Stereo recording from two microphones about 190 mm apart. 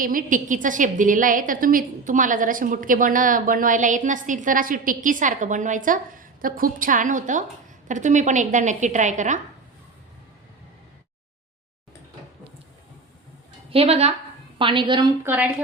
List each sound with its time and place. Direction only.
0.0 s a woman's voice: 45° right (ahead or behind)
13.7 s a woman's voice: 30° right (ahead or behind)
15.2 s a woman's voice: 10° right (ahead or behind)